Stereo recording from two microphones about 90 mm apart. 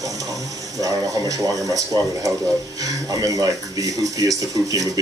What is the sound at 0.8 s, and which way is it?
Speech, 40° right (ahead or behind).